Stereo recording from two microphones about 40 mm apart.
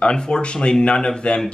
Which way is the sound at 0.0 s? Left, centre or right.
Left.